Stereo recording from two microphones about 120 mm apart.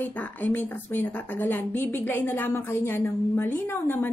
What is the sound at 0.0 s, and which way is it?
A woman's voice, 15° left (ahead or behind).